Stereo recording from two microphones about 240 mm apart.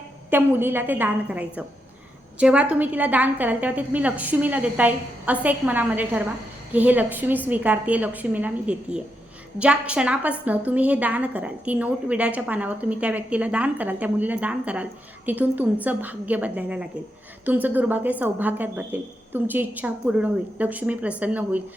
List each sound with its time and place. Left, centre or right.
0.3 s a woman's voice: centre